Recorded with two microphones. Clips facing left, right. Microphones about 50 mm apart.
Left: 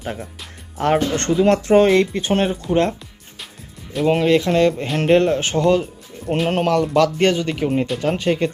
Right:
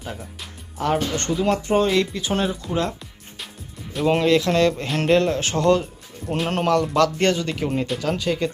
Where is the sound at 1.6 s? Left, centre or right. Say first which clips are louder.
Left 6 dB; left.